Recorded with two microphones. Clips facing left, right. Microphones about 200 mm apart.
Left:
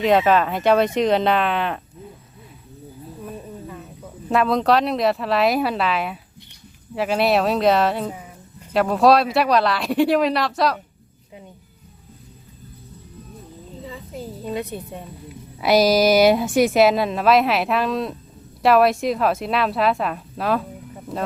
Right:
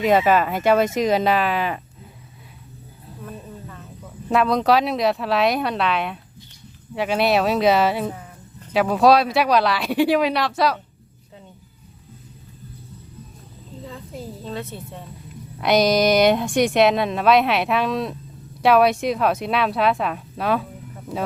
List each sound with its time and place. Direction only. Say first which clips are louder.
0.0 s a woman's voice: even; 5° right (ahead or behind)
3.2 s a sound: left 2 dB; 10° left (ahead or behind)
4.3 s a woman's voice: even; centre (ahead or behind)
13.8 s a sound: left 1 dB; centre (ahead or behind)
14.4 s a woman's voice: left 6 dB; 15° left (ahead or behind)
15.6 s a woman's voice: left 1 dB; 5° left (ahead or behind)